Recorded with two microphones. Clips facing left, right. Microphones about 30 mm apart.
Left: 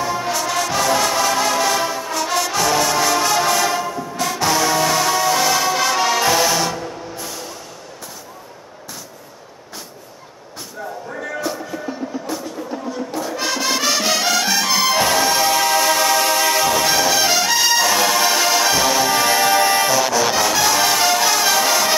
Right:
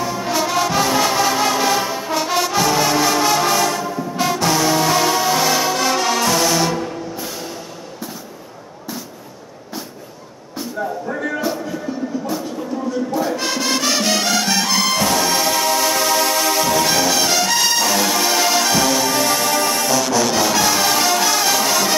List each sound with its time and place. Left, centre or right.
0.0 s music: centre
6.7 s music: centre
10.8 s music: centre
11.2 s music: centre
12.7 s music: centre
13.2 s music: centre; by 19.9 s left
19.9 s music: centre